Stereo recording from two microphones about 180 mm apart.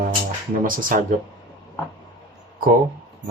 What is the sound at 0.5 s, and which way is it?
Speech, 50° right (ahead or behind).